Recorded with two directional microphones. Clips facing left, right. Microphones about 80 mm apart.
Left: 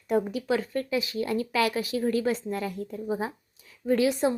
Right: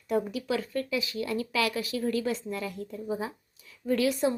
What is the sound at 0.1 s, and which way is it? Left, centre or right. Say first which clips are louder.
A woman's voice: left 3 dB; left.